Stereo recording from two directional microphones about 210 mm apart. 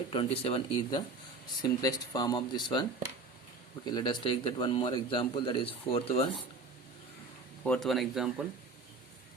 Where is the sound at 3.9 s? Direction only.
20° left (ahead or behind).